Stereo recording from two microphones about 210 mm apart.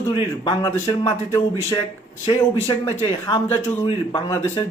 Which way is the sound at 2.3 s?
25° left (ahead or behind).